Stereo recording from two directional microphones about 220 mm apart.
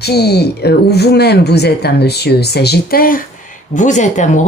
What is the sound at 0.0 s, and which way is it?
Speech, 45° left (ahead or behind).